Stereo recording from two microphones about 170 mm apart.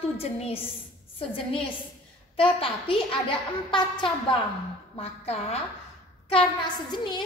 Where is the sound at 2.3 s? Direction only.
30° left (ahead or behind).